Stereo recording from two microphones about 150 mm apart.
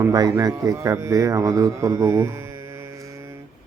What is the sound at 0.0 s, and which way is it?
A man's voice, 25° right (ahead or behind).